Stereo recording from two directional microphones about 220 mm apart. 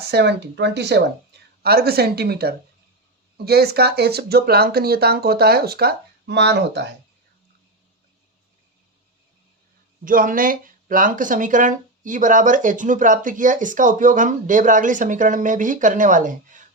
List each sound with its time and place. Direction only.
0.0 s speech: 50° right (ahead or behind)
10.0 s speech: 40° right (ahead or behind)